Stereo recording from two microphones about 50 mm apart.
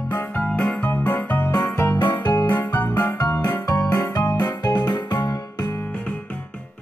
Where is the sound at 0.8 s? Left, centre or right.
Left.